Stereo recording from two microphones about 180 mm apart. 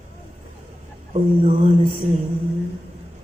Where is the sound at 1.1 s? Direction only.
35° right (ahead or behind).